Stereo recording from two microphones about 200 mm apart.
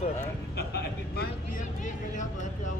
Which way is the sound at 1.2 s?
40° left (ahead or behind).